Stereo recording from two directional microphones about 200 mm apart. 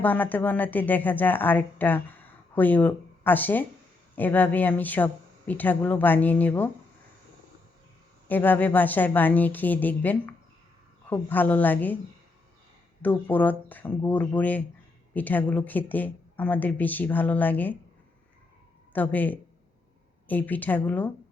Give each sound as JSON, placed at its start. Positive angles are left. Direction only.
{"t": 0.0, "sound": "speech", "side_deg": 10}
{"t": 8.3, "sound": "speech", "side_deg": 10}
{"t": 13.0, "sound": "speech", "side_deg": 10}
{"t": 18.9, "sound": "speech", "side_deg": 10}